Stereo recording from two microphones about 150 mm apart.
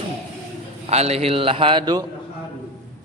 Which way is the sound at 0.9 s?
45° right (ahead or behind).